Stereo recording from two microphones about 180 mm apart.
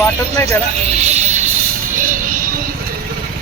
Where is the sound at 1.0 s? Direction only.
40° right (ahead or behind).